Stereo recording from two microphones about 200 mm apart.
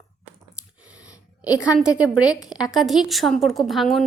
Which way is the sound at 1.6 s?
5° right (ahead or behind).